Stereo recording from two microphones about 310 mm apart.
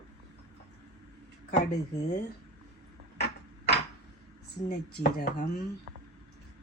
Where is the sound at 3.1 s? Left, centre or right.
Left.